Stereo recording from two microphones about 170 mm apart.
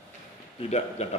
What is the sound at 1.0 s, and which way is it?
Speech, 40° left (ahead or behind).